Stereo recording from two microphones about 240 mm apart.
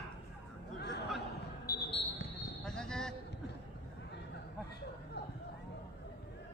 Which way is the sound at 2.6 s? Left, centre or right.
Centre.